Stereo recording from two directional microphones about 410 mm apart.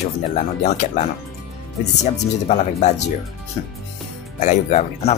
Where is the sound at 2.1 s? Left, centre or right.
Centre.